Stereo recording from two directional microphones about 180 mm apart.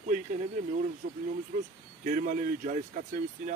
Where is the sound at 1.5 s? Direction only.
40° right (ahead or behind).